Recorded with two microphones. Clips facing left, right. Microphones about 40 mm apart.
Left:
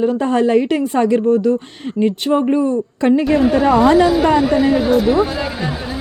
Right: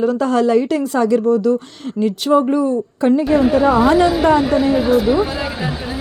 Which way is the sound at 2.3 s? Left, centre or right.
Centre.